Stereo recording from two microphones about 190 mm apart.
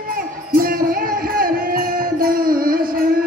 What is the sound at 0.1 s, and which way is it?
Music, 50° right (ahead or behind).